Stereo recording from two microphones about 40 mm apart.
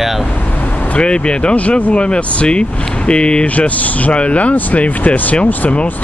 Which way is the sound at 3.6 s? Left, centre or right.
Left.